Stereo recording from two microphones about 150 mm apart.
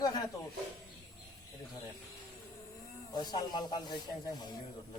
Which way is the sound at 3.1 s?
30° left (ahead or behind).